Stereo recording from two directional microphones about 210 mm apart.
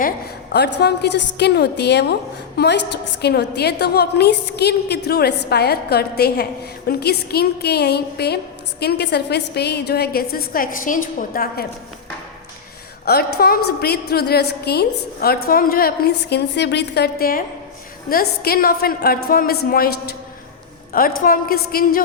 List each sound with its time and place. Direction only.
0.8 s a woman's voice: 55° left (ahead or behind)
13.1 s a woman's voice: 45° left (ahead or behind)
21.2 s a woman's voice: 45° left (ahead or behind)